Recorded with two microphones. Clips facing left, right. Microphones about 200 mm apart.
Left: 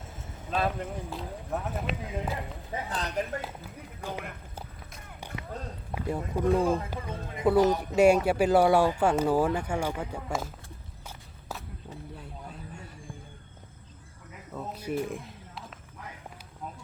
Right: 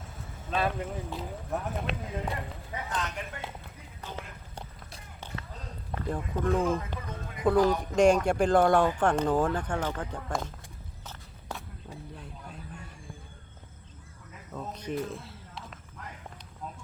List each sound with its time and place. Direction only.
0.5 s speech: centre (ahead or behind)
2.7 s speech: 35° left (ahead or behind)
3.4 s speech: 10° left (ahead or behind)
5.9 s speech: 10° left (ahead or behind)
6.6 s speech: 35° left (ahead or behind)
7.4 s speech: 5° left (ahead or behind)
11.0 s walk: 5° left (ahead or behind)
12.1 s vehicle: 5° left (ahead or behind)
14.5 s speech: 5° left (ahead or behind)